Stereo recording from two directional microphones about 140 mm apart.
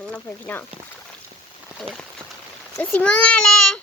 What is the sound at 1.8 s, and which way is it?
Speech, 5° left (ahead or behind).